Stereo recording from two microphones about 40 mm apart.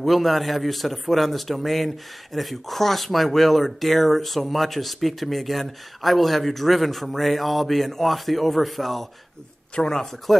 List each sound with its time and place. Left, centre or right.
0.0 s speech: centre
9.8 s speech: centre